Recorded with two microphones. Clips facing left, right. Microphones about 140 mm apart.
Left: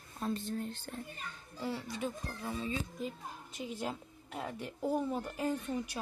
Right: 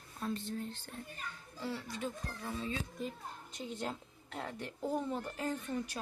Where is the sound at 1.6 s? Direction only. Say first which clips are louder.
Left 2 dB; 15° left (ahead or behind).